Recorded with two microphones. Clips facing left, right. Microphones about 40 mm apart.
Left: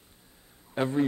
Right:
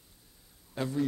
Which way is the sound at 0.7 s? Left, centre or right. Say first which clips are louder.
Left 5 dB; left.